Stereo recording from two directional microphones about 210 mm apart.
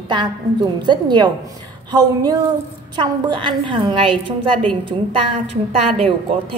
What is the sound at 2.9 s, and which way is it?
A woman's voice, 20° right (ahead or behind).